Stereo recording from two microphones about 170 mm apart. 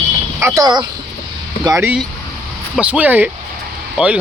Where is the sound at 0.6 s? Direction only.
25° right (ahead or behind).